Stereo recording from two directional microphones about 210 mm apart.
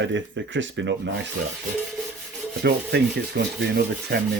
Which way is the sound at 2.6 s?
50° right (ahead or behind).